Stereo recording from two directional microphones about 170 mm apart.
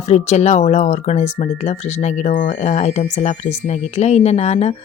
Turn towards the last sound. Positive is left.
turn(degrees=40)  # may be behind; listen again after turning